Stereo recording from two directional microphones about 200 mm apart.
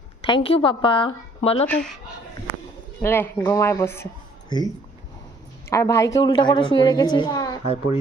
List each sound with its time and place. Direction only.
0.3 s a woman's voice: 25° left (ahead or behind)
3.0 s speech: 10° left (ahead or behind)
5.7 s a woman's voice: 15° left (ahead or behind)